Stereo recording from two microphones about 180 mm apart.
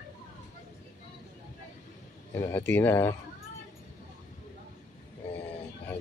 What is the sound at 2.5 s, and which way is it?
Speech, 10° left (ahead or behind).